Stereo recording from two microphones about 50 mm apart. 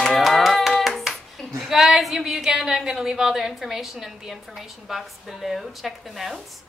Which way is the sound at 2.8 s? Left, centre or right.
Centre.